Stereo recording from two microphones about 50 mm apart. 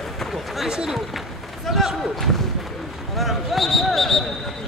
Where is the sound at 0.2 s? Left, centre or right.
Centre.